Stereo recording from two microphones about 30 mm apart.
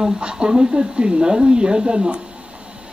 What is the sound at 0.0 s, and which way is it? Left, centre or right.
Speech, right.